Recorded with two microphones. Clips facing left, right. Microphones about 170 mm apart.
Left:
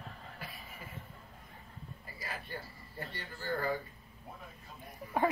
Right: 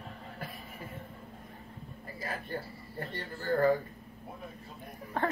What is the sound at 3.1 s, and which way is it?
Speech, 50° right (ahead or behind).